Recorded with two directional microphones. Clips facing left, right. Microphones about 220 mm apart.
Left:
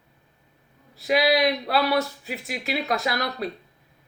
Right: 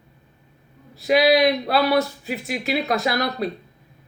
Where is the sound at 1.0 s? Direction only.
20° right (ahead or behind).